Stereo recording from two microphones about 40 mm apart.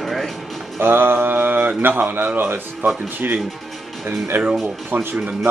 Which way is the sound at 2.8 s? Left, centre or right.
Right.